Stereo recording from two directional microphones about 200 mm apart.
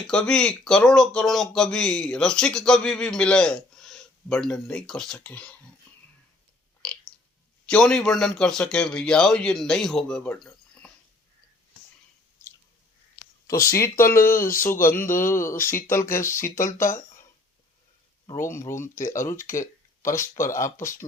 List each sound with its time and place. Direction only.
0.1 s speech: 5° left (ahead or behind)
7.7 s speech: 5° left (ahead or behind)
13.5 s speech: 15° left (ahead or behind)
14.3 s speech: 45° left (ahead or behind)
14.6 s speech: 10° left (ahead or behind)
18.3 s speech: 15° left (ahead or behind)